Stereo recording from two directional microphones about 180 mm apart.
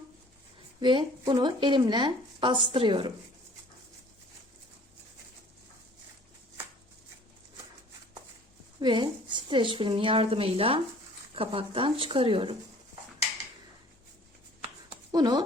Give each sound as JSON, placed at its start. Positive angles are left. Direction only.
{"t": 0.8, "sound": "speech", "side_deg": -25}
{"t": 8.8, "sound": "speech", "side_deg": -25}
{"t": 15.1, "sound": "speech", "side_deg": -20}